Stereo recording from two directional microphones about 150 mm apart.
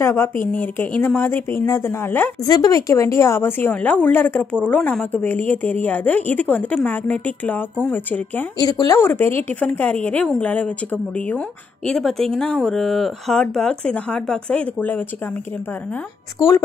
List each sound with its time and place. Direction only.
0.0 s speech: 15° left (ahead or behind)
2.4 s speech: 25° left (ahead or behind)
8.5 s speech: 25° left (ahead or behind)
16.3 s a woman's voice: 20° left (ahead or behind)